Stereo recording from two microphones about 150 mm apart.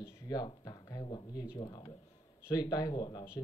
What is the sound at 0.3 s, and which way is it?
Speech, 25° left (ahead or behind).